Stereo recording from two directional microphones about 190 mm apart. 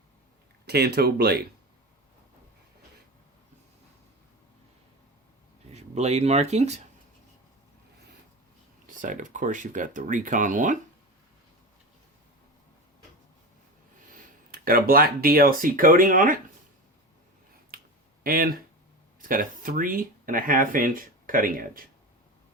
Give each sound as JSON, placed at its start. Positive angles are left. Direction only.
{"t": 0.7, "sound": "speech", "side_deg": -55}
{"t": 5.7, "sound": "speech", "side_deg": -35}
{"t": 9.0, "sound": "speech", "side_deg": -45}
{"t": 14.5, "sound": "speech", "side_deg": -50}
{"t": 17.7, "sound": "finger snapping", "side_deg": -50}
{"t": 18.2, "sound": "speech", "side_deg": -50}